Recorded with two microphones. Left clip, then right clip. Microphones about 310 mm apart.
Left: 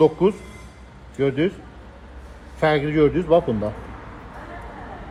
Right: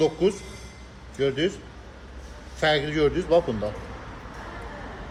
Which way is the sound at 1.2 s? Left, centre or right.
Centre.